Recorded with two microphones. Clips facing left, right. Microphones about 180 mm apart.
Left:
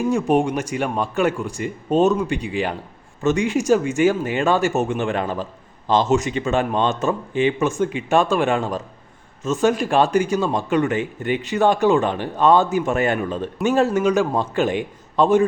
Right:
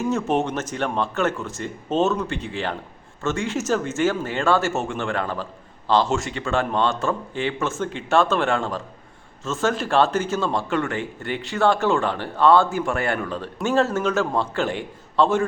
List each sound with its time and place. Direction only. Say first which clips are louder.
0.0 s speech: left 4 dB; 15° left (ahead or behind)